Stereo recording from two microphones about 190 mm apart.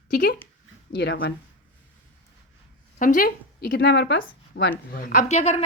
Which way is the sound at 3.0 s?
45° left (ahead or behind).